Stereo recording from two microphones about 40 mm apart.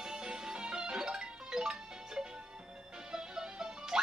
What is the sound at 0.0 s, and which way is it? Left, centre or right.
Music, centre.